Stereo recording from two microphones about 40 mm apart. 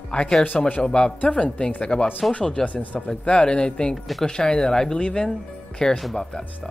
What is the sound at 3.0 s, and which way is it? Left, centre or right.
Speech, left.